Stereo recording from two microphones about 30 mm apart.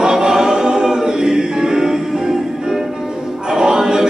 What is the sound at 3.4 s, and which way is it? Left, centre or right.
Music, right.